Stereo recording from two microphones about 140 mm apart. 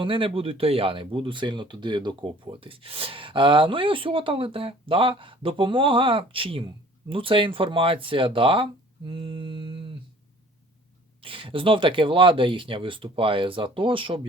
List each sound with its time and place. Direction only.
0.0 s speech: 40° right (ahead or behind)
11.2 s speech: 40° right (ahead or behind)